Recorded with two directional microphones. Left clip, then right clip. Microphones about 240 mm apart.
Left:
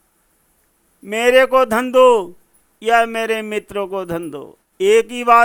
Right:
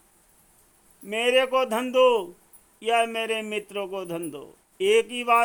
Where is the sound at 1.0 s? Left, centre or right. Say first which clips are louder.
Left 9 dB; centre.